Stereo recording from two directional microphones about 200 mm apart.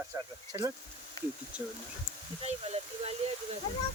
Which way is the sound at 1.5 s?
5° right (ahead or behind).